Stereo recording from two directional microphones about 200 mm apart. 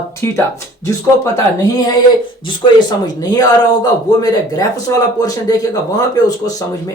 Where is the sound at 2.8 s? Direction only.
20° left (ahead or behind).